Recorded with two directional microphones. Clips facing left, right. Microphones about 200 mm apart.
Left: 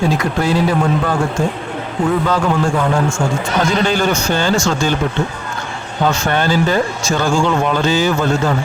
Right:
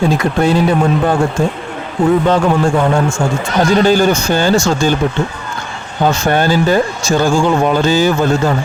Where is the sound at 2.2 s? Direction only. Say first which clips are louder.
Right 4 dB; 25° right (ahead or behind).